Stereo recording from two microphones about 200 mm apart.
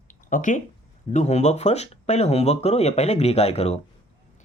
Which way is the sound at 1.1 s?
35° left (ahead or behind).